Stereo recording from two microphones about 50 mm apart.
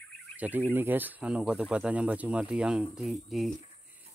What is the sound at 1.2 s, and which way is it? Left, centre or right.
Speech, right.